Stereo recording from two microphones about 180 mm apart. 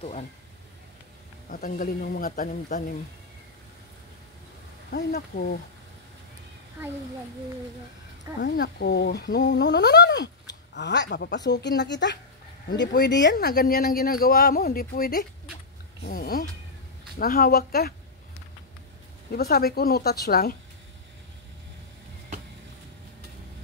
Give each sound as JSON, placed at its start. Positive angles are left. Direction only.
{"t": 1.5, "sound": "speech", "side_deg": 50}
{"t": 4.9, "sound": "speech", "side_deg": 60}
{"t": 8.4, "sound": "a woman's voice", "side_deg": 70}
{"t": 19.3, "sound": "speech", "side_deg": 60}